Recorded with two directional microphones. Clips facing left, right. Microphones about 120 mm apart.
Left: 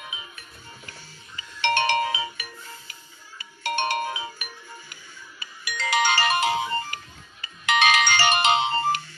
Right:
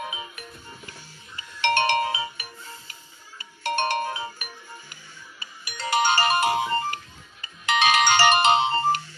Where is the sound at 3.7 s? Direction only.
40° right (ahead or behind).